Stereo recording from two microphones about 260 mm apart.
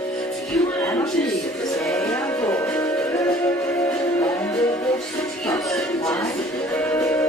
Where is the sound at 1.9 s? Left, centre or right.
Centre.